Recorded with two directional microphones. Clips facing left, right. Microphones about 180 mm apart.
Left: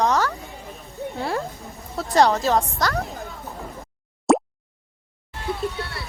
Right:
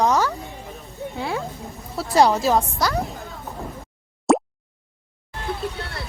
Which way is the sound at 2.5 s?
Centre (ahead or behind).